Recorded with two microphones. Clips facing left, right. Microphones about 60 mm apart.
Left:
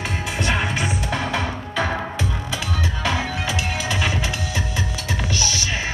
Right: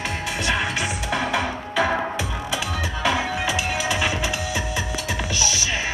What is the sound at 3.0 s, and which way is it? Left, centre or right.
Music, centre.